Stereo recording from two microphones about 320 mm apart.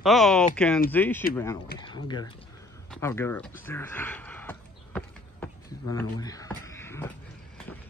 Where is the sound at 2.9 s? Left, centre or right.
Centre.